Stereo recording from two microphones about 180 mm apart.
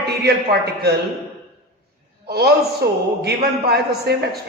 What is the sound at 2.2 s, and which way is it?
A man's voice, 65° right (ahead or behind).